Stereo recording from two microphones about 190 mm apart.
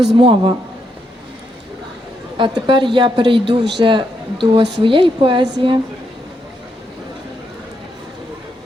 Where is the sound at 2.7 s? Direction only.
25° right (ahead or behind).